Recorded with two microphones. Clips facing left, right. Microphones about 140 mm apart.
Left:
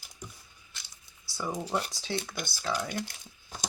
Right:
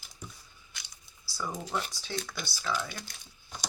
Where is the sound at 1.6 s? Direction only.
35° left (ahead or behind).